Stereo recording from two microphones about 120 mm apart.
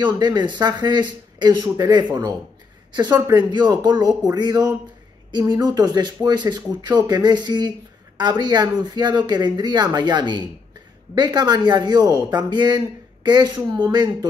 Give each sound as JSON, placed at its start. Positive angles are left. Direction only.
{"t": 0.0, "sound": "speech", "side_deg": -40}
{"t": 3.3, "sound": "speech", "side_deg": -35}